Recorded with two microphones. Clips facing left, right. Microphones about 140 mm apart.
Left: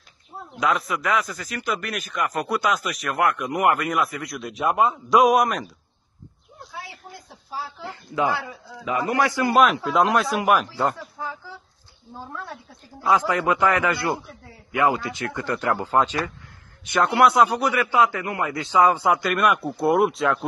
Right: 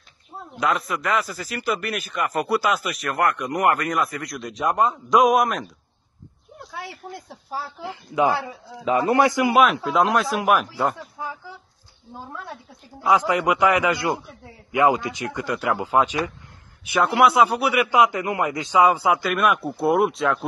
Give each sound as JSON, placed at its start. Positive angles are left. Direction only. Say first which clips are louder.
{"t": 0.6, "sound": "a man's voice", "louder": "even", "side_deg": 0}
{"t": 7.8, "sound": "a man's voice", "louder": "right 3 dB", "side_deg": -15}
{"t": 9.5, "sound": "a man's voice", "louder": "even", "side_deg": 0}
{"t": 11.1, "sound": "a man's voice", "louder": "even", "side_deg": -15}
{"t": 13.0, "sound": "a man's voice", "louder": "right 1 dB", "side_deg": -15}